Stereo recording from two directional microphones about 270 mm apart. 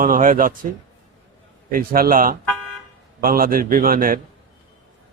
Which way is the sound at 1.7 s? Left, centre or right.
Right.